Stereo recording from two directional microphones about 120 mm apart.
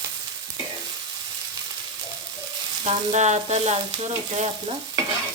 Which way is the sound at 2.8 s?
70° right (ahead or behind).